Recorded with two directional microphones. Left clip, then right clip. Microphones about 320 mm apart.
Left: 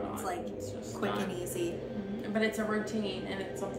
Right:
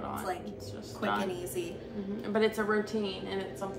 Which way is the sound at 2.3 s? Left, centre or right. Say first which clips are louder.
Right 3 dB; centre.